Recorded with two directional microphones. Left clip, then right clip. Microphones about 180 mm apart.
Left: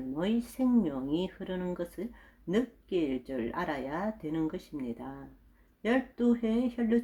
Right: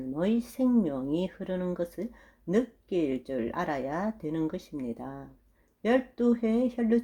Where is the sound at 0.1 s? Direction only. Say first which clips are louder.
Right 3 dB; 25° right (ahead or behind).